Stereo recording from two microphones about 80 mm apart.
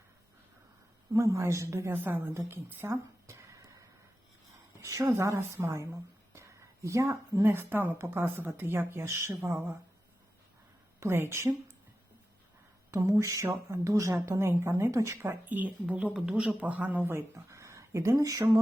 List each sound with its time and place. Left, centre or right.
1.1 s speech: right
2.5 s a sound: right
4.8 s a woman's voice: right
11.0 s speech: right
12.9 s speech: right
15.4 s speech: centre
17.1 s speech: right